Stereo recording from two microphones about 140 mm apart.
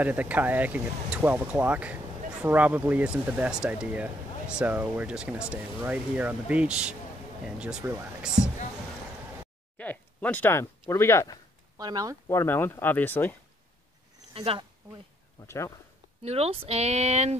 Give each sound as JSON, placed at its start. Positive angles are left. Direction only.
{"t": 0.0, "sound": "speech", "side_deg": -10}
{"t": 9.8, "sound": "speech", "side_deg": 10}
{"t": 11.8, "sound": "speech", "side_deg": -25}
{"t": 12.3, "sound": "speech", "side_deg": 20}
{"t": 14.3, "sound": "speech", "side_deg": -40}
{"t": 15.4, "sound": "speech", "side_deg": 20}
{"t": 16.2, "sound": "speech", "side_deg": -45}